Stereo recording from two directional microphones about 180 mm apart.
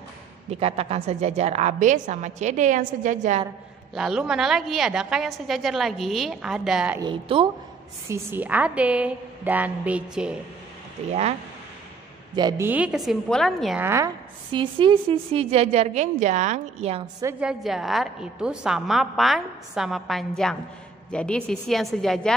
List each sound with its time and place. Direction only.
0.5 s a woman's voice: 35° right (ahead or behind)
3.9 s a woman's voice: centre (ahead or behind)
7.0 s a woman's voice: 30° right (ahead or behind)
8.1 s a woman's voice: 10° right (ahead or behind)
12.4 s a woman's voice: 20° right (ahead or behind); by 13.7 s centre (ahead or behind)
13.7 s a woman's voice: 15° right (ahead or behind)
14.5 s a woman's voice: 30° right (ahead or behind)
17.2 s a woman's voice: 10° right (ahead or behind)